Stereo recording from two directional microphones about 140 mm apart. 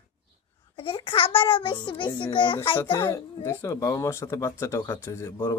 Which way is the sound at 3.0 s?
20° left (ahead or behind).